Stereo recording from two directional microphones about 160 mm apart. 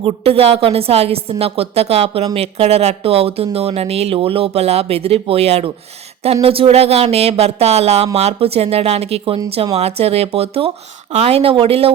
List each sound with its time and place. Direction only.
0.0 s speech: 35° right (ahead or behind)